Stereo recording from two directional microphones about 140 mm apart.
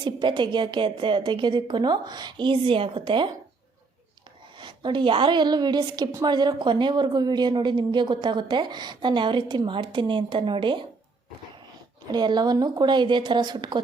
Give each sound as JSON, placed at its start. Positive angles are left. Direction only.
{"t": 0.0, "sound": "a woman's voice", "side_deg": -35}
{"t": 4.6, "sound": "a woman's voice", "side_deg": -35}
{"t": 12.1, "sound": "a woman's voice", "side_deg": -30}